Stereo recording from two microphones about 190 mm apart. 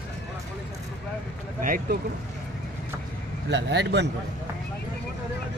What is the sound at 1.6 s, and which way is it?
Speech, 50° right (ahead or behind).